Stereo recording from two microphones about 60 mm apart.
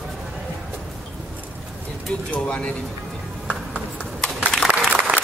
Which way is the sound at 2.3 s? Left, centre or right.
Centre.